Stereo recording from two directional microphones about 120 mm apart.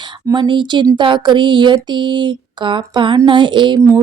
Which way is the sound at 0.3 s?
40° right (ahead or behind).